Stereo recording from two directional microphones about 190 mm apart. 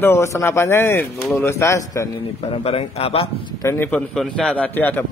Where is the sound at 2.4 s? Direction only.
35° left (ahead or behind).